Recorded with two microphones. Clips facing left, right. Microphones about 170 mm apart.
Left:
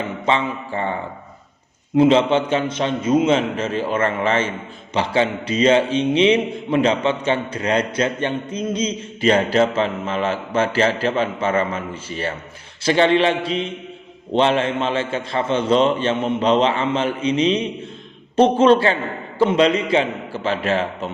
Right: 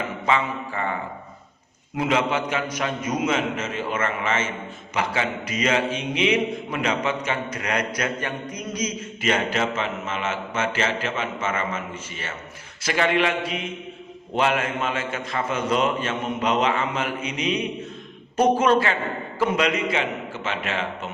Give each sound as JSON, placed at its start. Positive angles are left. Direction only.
{"t": 0.3, "sound": "a man's voice", "side_deg": 30}
{"t": 2.0, "sound": "a man's voice", "side_deg": 30}